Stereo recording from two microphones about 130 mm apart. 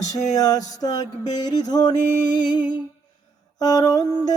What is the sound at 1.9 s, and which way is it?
Music, 70° left (ahead or behind).